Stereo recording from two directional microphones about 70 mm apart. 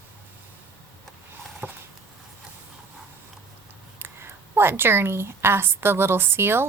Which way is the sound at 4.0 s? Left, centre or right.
Right.